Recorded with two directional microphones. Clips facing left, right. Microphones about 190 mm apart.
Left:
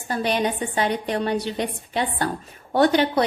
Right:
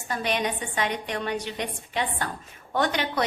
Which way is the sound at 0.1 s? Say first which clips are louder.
Left 4 dB; 35° left (ahead or behind).